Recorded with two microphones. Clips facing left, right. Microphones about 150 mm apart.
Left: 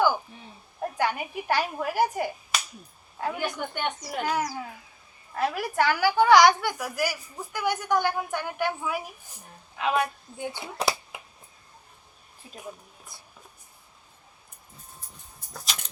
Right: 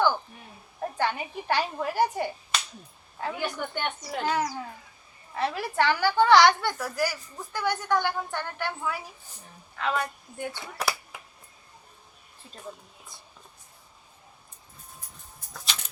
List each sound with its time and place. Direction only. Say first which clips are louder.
0.9 s a woman's voice: left 1 dB; 10° left (ahead or behind)
12.5 s music: left 1 dB; 10° left (ahead or behind)